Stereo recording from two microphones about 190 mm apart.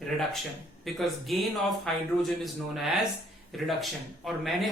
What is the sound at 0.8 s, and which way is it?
A man's voice, centre (ahead or behind).